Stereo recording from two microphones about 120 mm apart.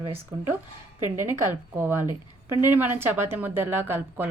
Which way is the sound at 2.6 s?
15° right (ahead or behind).